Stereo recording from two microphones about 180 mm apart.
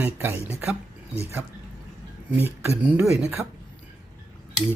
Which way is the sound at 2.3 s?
10° right (ahead or behind).